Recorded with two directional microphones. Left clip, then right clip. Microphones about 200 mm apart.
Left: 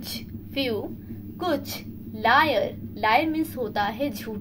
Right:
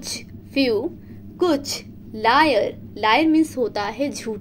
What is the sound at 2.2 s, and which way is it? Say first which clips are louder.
A woman's voice: right 3 dB; 40° right (ahead or behind).